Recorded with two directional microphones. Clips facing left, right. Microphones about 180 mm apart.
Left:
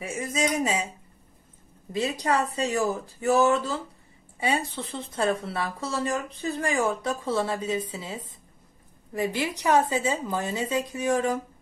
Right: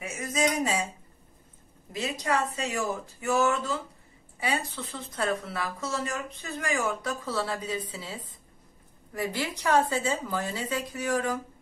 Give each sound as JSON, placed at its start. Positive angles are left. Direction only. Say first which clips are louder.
{"t": 0.0, "sound": "speech", "louder": "even", "side_deg": 25}
{"t": 1.9, "sound": "speech", "louder": "left 4 dB", "side_deg": 35}